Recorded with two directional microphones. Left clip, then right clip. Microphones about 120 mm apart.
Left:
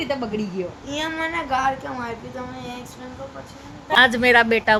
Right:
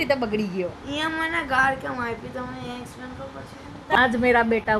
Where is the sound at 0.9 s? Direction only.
40° left (ahead or behind).